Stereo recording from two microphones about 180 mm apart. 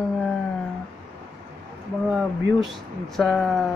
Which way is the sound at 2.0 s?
5° right (ahead or behind).